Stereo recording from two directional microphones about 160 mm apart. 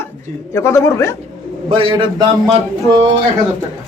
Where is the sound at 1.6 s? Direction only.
35° right (ahead or behind).